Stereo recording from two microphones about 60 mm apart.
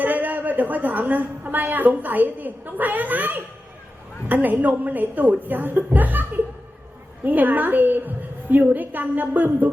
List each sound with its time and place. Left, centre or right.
0.0 s a woman's voice: right
7.3 s a woman's voice: right